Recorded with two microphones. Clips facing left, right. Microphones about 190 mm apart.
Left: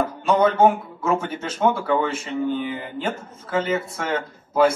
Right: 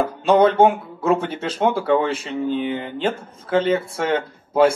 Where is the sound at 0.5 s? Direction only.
30° right (ahead or behind).